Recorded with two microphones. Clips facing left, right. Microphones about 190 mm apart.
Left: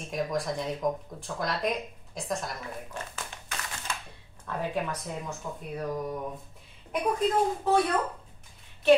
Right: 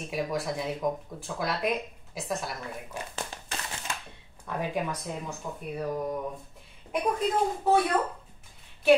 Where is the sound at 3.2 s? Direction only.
30° right (ahead or behind).